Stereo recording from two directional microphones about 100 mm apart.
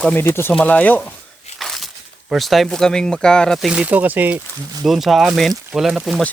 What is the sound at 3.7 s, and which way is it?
Speech, 15° right (ahead or behind).